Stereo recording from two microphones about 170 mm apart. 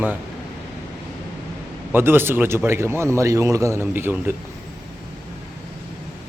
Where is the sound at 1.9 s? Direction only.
15° right (ahead or behind).